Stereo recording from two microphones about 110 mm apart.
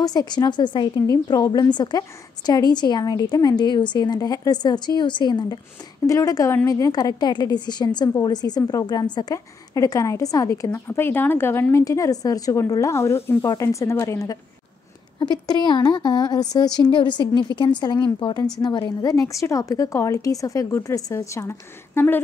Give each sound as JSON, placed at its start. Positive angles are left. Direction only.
{"t": 0.0, "sound": "a woman's voice", "side_deg": 40}
{"t": 6.0, "sound": "a woman's voice", "side_deg": 30}